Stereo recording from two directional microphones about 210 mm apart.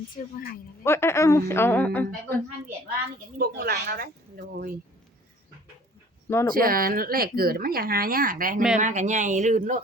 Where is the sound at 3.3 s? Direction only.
45° right (ahead or behind).